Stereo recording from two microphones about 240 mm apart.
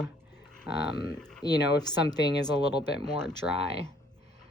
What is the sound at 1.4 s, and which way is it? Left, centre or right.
Speech, centre.